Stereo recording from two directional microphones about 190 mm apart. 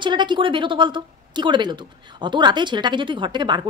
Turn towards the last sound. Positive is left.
turn(degrees=-25)  # may be behind; listen again after turning